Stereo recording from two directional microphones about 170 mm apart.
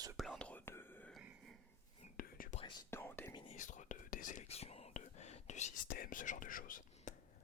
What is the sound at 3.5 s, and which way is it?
Whispering, 45° left (ahead or behind).